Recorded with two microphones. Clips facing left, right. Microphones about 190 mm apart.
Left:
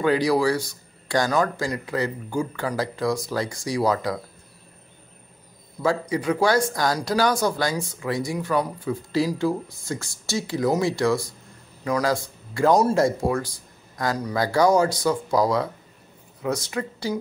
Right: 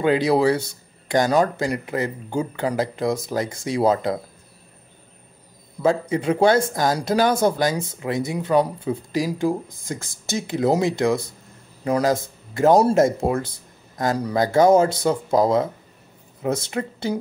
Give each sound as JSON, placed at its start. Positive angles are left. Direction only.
{"t": 0.0, "sound": "speech", "side_deg": -20}
{"t": 5.8, "sound": "speech", "side_deg": -25}